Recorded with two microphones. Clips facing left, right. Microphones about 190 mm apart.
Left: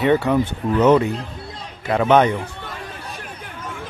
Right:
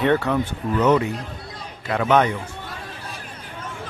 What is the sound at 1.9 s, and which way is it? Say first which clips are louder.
Speech: left 3 dB; 25° left (ahead or behind).